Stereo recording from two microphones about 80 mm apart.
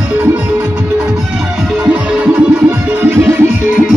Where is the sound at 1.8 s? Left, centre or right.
Centre.